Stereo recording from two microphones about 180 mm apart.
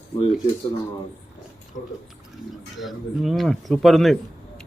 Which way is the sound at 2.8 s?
Centre (ahead or behind).